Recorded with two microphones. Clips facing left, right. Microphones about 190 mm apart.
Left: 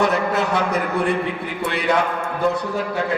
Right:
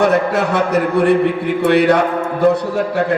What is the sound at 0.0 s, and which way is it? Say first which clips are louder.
A man's voice: right 5 dB; 70° right (ahead or behind).